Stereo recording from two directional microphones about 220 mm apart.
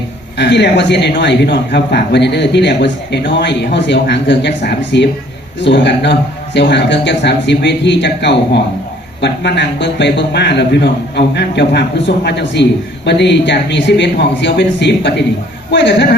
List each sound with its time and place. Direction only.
0.3 s a man's voice: 50° left (ahead or behind)